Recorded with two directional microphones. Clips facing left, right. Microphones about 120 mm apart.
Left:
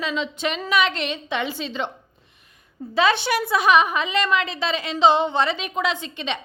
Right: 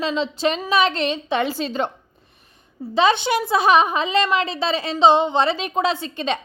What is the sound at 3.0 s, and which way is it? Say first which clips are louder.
A woman's voice: right 2 dB; 20° right (ahead or behind).